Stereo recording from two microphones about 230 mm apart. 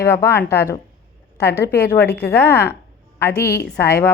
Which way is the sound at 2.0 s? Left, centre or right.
Left.